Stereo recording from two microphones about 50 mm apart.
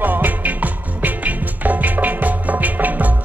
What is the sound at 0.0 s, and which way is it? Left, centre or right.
Music, right.